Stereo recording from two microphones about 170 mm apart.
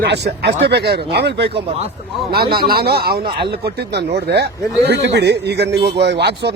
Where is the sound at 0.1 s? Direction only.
80° right.